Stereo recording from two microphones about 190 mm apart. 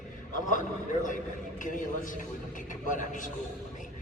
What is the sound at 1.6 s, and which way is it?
A man's voice, 45° left (ahead or behind).